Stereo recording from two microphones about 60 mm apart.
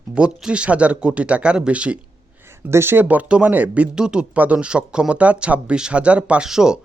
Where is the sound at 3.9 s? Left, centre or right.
Centre.